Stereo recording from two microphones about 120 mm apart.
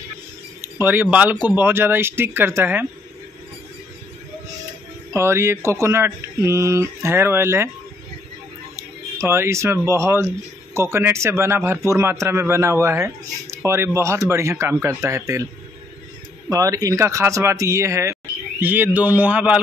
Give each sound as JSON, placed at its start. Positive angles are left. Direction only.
{"t": 0.7, "sound": "speech", "side_deg": -15}
{"t": 5.1, "sound": "speech", "side_deg": -20}
{"t": 8.7, "sound": "speech", "side_deg": -20}
{"t": 16.4, "sound": "speech", "side_deg": -30}